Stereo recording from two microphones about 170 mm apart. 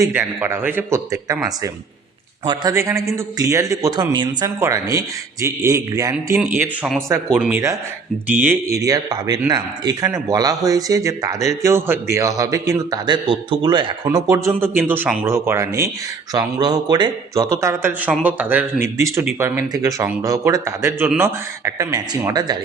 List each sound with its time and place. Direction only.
0.0 s a man's voice: 15° right (ahead or behind)
2.5 s speech: 20° right (ahead or behind)
6.6 s a man's voice: centre (ahead or behind)
8.8 s a man's voice: 20° right (ahead or behind)